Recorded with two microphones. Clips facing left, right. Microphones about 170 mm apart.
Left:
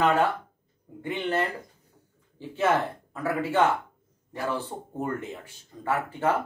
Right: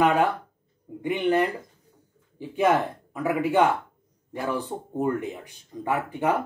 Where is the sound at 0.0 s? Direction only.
15° right (ahead or behind).